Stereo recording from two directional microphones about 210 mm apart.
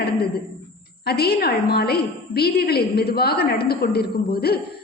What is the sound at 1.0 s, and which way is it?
A woman's voice, 50° left (ahead or behind).